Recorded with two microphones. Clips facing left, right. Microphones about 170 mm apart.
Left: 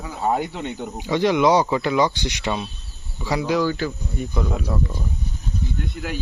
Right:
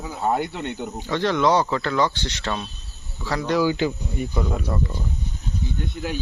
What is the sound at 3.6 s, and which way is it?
Speech, 20° right (ahead or behind).